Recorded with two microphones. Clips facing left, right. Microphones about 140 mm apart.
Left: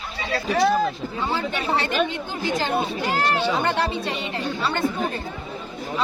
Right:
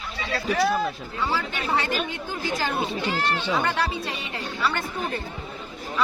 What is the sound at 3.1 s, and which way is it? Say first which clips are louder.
Speech: left 4 dB; 45° left (ahead or behind).